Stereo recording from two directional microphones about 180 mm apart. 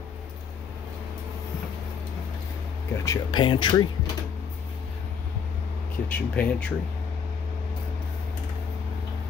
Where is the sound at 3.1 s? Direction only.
25° left (ahead or behind).